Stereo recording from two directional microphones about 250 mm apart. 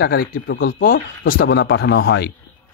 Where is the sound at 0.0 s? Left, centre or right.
Left.